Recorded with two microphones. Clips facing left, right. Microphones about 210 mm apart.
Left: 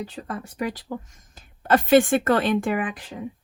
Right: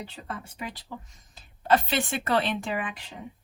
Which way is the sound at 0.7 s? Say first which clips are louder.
Left 9 dB; 45° left (ahead or behind).